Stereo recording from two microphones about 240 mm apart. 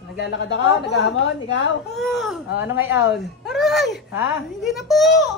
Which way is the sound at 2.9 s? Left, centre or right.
Left.